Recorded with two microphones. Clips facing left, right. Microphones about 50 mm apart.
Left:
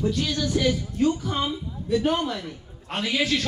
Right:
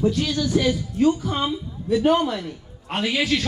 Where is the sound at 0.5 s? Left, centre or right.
Centre.